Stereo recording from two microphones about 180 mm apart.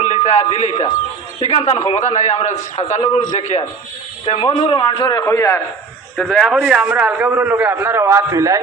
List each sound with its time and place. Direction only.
0.0 s a man's voice: 40° left (ahead or behind); by 5.5 s 15° left (ahead or behind)
6.1 s a man's voice: centre (ahead or behind); by 8.6 s 20° right (ahead or behind)